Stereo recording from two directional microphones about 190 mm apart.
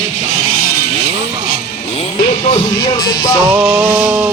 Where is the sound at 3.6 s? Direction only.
Centre (ahead or behind).